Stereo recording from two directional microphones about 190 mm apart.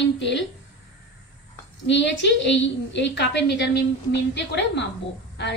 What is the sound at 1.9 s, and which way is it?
A woman's voice, 70° left (ahead or behind).